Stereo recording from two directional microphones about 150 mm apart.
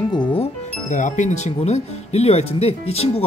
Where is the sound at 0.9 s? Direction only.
55° left (ahead or behind).